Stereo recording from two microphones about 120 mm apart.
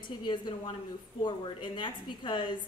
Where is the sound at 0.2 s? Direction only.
40° left (ahead or behind).